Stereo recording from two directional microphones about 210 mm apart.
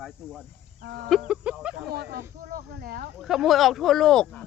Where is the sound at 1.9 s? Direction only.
50° right (ahead or behind).